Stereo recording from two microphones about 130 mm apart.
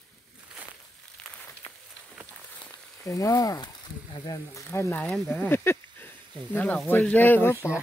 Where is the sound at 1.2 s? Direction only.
5° left (ahead or behind).